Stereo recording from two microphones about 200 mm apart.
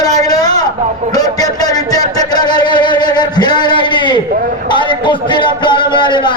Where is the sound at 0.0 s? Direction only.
20° left (ahead or behind).